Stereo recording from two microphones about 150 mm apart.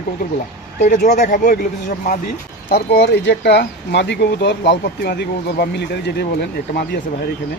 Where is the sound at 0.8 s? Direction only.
55° left (ahead or behind).